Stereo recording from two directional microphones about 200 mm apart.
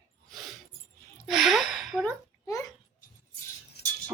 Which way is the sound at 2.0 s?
15° left (ahead or behind).